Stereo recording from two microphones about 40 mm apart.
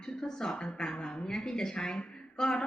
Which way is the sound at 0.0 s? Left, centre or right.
Centre.